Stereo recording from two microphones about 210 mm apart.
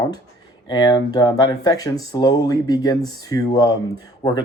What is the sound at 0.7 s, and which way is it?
Speech, 20° left (ahead or behind).